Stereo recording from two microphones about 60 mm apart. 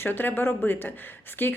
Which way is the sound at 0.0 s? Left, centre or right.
Left.